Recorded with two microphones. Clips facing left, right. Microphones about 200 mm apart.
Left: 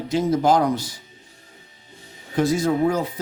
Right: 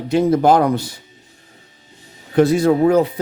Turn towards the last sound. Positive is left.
turn(degrees=-60)  # may be behind; listen again after turning